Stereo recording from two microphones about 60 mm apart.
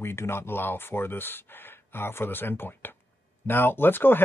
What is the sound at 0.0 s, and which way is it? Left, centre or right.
Speech, left.